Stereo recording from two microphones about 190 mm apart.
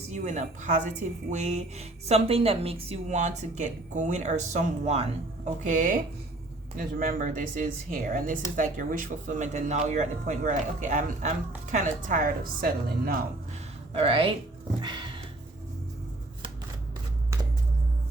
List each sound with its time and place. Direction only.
0.1 s a woman's voice: 40° right (ahead or behind)
13.9 s speech: 30° right (ahead or behind)
14.8 s a sound: 25° right (ahead or behind)